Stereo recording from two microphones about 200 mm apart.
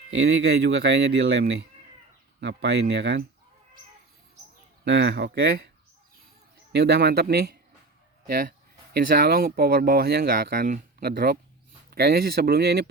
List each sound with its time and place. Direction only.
0.1 s speech: 60° right (ahead or behind)
4.9 s speech: 60° right (ahead or behind)
6.7 s speech: 55° right (ahead or behind)